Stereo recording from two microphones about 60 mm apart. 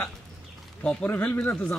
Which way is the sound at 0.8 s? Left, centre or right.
Centre.